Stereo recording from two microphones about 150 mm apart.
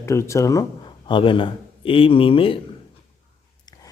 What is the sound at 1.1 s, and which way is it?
A man's voice, 35° left (ahead or behind).